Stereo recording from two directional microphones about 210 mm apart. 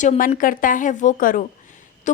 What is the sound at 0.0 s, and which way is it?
A woman's voice, 35° left (ahead or behind).